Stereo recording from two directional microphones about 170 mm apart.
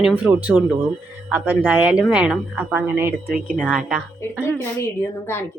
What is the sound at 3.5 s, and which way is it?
Speech, 5° left (ahead or behind).